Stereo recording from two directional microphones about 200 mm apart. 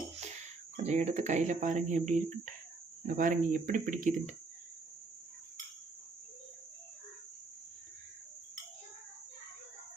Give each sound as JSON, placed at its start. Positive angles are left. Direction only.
{"t": 0.8, "sound": "speech", "side_deg": -35}